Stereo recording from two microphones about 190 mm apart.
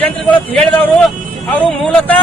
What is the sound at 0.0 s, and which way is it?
Music, 5° left (ahead or behind).